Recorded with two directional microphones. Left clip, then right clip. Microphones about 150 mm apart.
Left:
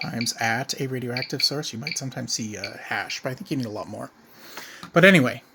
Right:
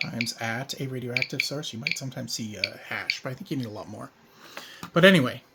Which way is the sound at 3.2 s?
15° left (ahead or behind).